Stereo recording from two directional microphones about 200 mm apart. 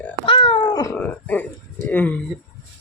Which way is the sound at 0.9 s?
10° left (ahead or behind).